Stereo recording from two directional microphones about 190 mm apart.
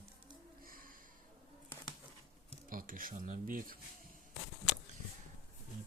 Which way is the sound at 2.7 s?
45° right (ahead or behind).